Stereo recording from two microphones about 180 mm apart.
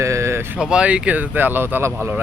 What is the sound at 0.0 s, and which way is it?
Speech, 15° right (ahead or behind).